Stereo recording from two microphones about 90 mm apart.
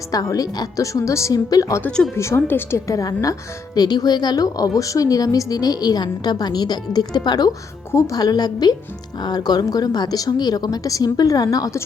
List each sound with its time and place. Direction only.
0.1 s a woman's voice: 40° left (ahead or behind)
2.1 s a woman's voice: 30° left (ahead or behind)